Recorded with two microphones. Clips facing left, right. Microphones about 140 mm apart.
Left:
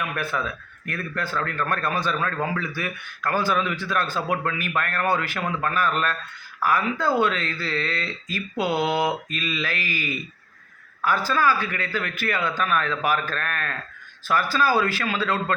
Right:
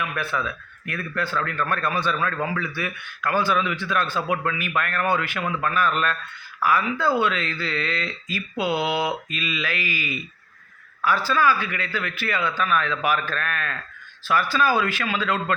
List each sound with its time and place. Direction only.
0.1 s a man's voice: 40° left (ahead or behind)